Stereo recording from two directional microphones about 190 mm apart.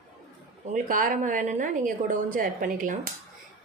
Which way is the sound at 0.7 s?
45° right (ahead or behind).